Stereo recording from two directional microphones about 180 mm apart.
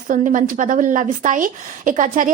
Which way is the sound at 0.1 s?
45° right (ahead or behind).